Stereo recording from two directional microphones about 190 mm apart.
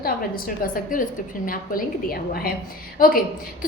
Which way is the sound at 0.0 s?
50° left (ahead or behind).